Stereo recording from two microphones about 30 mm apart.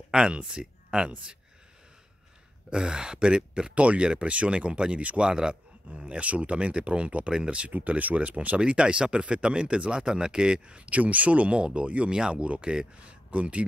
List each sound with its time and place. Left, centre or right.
0.1 s speech: right
2.7 s speech: right
3.7 s speech: right
6.0 s speech: right
8.0 s speech: right
8.5 s speech: right
10.9 s speech: right
12.1 s speech: right
13.3 s speech: right